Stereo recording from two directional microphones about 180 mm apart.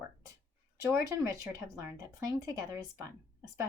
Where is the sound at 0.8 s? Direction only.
15° right (ahead or behind).